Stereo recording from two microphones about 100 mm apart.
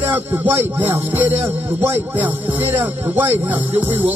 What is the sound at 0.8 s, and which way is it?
Music, 20° right (ahead or behind).